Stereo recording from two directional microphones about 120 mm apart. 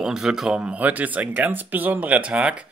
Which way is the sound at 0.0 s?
5° right (ahead or behind).